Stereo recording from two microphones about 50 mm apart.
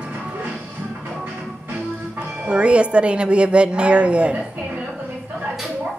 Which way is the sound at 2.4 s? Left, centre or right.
Right.